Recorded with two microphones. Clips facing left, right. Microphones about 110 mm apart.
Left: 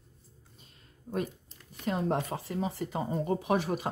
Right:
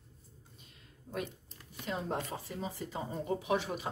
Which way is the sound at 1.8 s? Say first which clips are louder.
Left 6 dB; 55° left (ahead or behind).